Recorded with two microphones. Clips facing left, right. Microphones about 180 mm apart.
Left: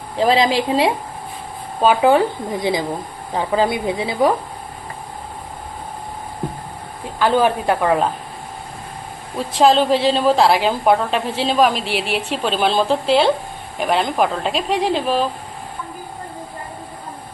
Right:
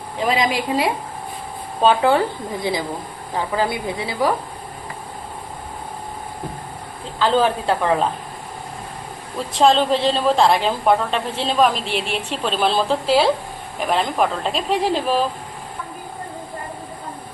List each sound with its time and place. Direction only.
0.2 s speech: 30° left (ahead or behind)
1.8 s speech: 15° left (ahead or behind)
7.2 s speech: 15° left (ahead or behind)
9.5 s a woman's voice: centre (ahead or behind)